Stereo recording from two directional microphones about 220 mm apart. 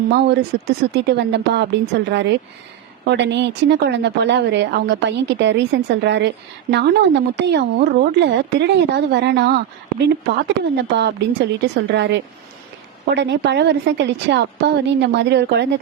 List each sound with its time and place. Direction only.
0.1 s speech: 50° right (ahead or behind)
10.8 s speech: 50° right (ahead or behind)